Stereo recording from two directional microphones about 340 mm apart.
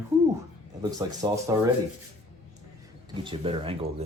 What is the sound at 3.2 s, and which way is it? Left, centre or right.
Speech, centre.